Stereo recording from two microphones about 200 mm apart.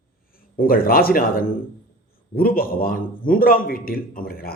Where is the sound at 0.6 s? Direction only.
45° left (ahead or behind).